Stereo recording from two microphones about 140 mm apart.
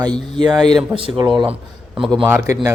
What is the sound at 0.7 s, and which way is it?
Speech, 35° right (ahead or behind).